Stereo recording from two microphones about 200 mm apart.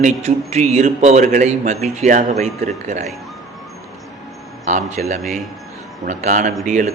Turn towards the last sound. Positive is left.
turn(degrees=-40)  # may be behind; listen again after turning